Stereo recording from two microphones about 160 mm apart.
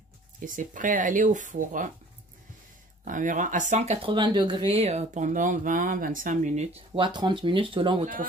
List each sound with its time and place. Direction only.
0.6 s speech: 55° right (ahead or behind)
3.1 s speech: 55° right (ahead or behind)
4.1 s speech: 30° right (ahead or behind); by 6.8 s 45° right (ahead or behind)
7.0 s speech: 30° right (ahead or behind)